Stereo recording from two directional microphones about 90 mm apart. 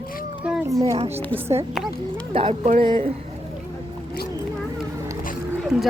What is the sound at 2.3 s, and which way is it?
Speech, 90° right.